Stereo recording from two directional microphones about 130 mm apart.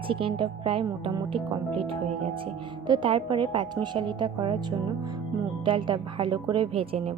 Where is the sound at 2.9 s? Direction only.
40° right (ahead or behind).